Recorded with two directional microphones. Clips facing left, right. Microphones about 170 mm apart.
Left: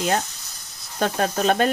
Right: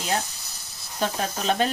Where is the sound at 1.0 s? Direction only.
55° left (ahead or behind).